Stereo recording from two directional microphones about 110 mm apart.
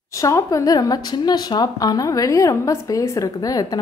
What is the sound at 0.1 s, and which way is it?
Speech, 30° left (ahead or behind).